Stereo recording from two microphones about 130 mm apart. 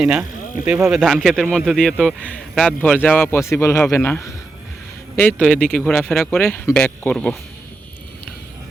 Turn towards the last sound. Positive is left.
turn(degrees=10)  # may be behind; listen again after turning